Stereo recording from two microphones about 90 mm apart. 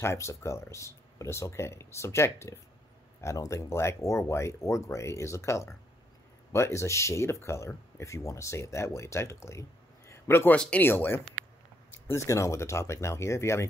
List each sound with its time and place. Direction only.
0.0 s speech: 30° left (ahead or behind)
12.1 s speech: 35° left (ahead or behind)